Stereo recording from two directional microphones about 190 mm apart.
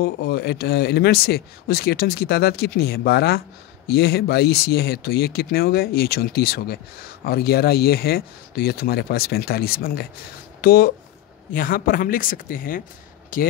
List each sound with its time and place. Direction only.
0.0 s speech: 55° left (ahead or behind)